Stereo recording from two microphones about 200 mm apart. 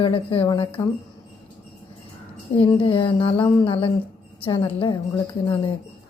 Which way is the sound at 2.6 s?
25° left (ahead or behind).